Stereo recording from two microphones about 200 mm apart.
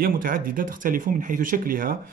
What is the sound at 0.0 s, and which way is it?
Speech, 45° right (ahead or behind).